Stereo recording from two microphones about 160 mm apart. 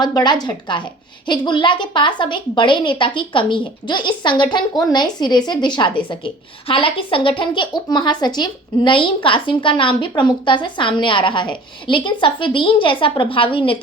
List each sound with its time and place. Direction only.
0.0 s a woman's voice: 25° left (ahead or behind)